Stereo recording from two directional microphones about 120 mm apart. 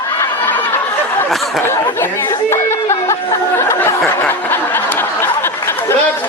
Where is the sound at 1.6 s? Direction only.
20° left (ahead or behind).